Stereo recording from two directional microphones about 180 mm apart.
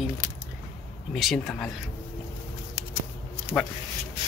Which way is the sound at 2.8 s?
30° right (ahead or behind).